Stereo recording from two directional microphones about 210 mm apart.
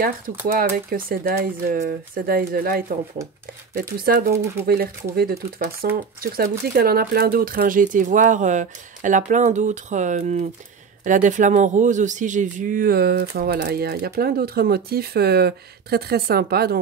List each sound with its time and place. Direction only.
0.5 s speech: 45° right (ahead or behind)